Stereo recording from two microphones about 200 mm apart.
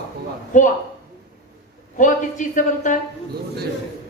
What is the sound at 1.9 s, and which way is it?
A man's voice, 40° left (ahead or behind).